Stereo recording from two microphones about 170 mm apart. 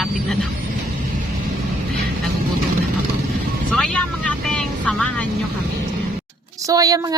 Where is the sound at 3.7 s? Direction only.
5° left (ahead or behind).